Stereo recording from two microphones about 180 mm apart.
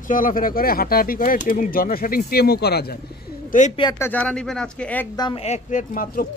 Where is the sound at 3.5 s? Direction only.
45° left (ahead or behind).